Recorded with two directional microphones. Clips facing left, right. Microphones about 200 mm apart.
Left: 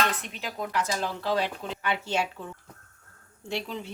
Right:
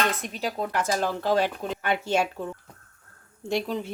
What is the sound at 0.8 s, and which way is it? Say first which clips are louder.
Speech: right 3 dB; 50° right (ahead or behind).